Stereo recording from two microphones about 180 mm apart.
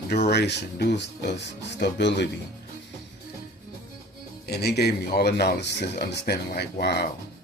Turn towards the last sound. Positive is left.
turn(degrees=65)  # may be behind; listen again after turning